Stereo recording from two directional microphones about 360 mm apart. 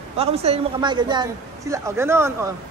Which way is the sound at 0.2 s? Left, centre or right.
Centre.